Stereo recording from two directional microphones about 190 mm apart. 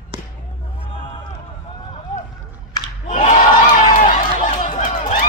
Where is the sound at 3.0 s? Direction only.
40° left (ahead or behind).